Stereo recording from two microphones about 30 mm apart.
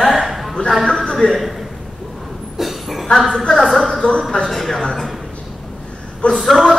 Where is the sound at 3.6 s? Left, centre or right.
Centre.